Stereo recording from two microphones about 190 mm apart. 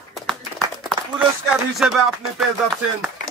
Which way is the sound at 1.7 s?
Centre (ahead or behind).